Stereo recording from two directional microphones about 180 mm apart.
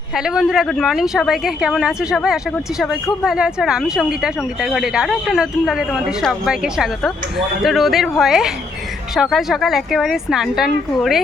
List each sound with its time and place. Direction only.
0.2 s speech: 5° right (ahead or behind)